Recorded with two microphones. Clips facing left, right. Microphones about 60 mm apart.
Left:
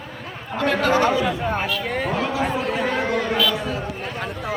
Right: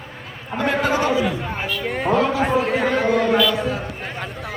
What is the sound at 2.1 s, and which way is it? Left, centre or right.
Speech, centre.